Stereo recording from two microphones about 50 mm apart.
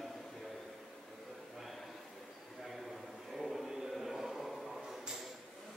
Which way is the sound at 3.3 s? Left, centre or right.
Centre.